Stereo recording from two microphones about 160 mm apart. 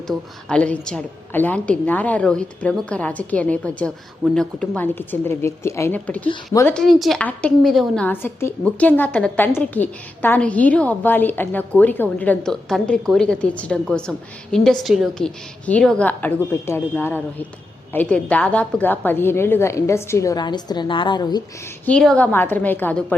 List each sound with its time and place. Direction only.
0.1 s a woman's voice: 5° left (ahead or behind)
6.7 s a woman's voice: centre (ahead or behind); by 21.4 s 25° left (ahead or behind)
21.8 s a woman's voice: 5° left (ahead or behind)